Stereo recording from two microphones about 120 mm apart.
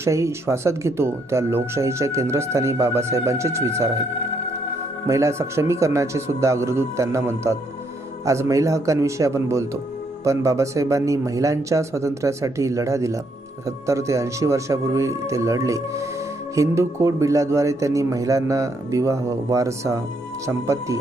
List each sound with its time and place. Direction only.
0.0 s speech: 25° right (ahead or behind)
5.0 s speech: 25° right (ahead or behind)